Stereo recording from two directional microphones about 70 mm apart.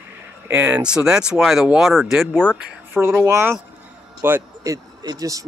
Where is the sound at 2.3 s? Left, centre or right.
Centre.